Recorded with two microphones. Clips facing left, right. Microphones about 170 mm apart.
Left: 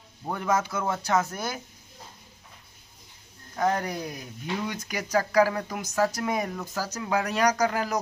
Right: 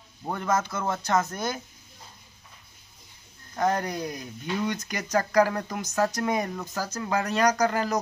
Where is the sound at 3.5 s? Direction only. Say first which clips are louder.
Even; centre (ahead or behind).